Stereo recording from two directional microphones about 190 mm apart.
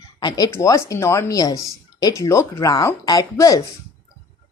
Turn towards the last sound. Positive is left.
turn(degrees=20)  # may be behind; listen again after turning